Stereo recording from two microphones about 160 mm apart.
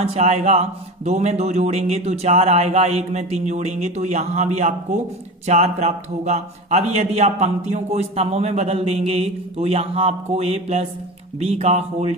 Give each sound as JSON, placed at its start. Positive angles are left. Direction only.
{"t": 0.0, "sound": "a man's voice", "side_deg": -40}